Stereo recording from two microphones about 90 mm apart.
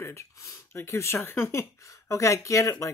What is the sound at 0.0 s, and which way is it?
Speech, 30° left (ahead or behind).